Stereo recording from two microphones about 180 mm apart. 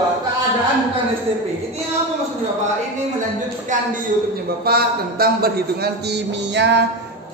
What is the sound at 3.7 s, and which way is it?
Speech, 45° right (ahead or behind).